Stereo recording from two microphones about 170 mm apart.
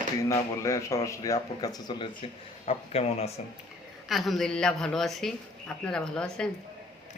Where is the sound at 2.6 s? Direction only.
35° left (ahead or behind).